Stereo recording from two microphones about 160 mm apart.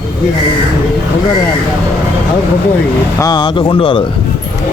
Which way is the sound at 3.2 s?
25° left (ahead or behind).